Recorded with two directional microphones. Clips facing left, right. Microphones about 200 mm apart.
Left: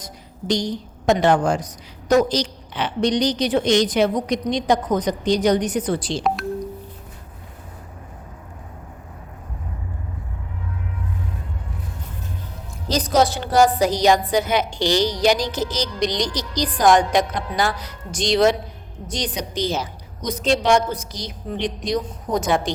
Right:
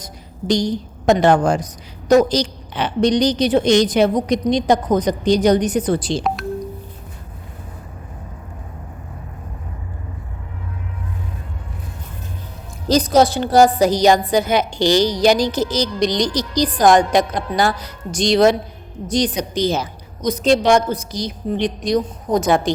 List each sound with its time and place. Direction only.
0.0 s a woman's voice: 40° right (ahead or behind)
12.9 s a woman's voice: 30° right (ahead or behind)